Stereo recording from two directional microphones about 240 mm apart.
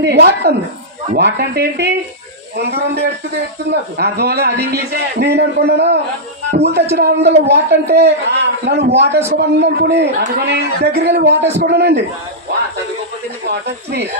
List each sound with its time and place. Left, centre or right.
0.0 s a man's voice: right
11.3 s a man's voice: right
11.6 s a man's voice: right